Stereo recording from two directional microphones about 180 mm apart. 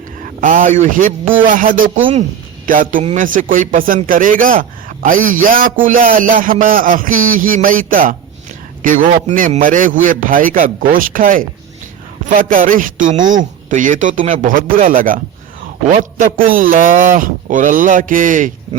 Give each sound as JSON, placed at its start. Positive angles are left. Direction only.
{"t": 0.4, "sound": "a man's voice", "side_deg": -50}